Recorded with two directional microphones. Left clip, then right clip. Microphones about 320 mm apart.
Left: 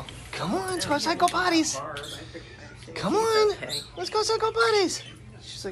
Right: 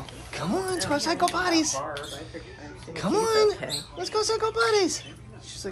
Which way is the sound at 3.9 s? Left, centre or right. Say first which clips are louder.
Left 1 dB; centre.